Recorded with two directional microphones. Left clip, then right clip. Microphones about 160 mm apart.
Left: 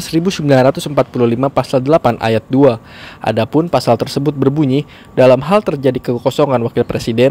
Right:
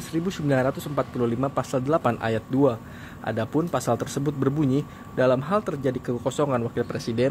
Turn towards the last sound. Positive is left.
turn(degrees=35)  # may be behind; listen again after turning